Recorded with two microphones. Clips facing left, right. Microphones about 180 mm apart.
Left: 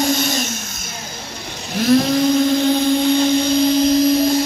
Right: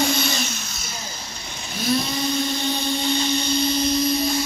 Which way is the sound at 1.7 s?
90° left.